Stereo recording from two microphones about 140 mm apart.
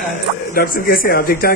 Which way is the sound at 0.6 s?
90° left.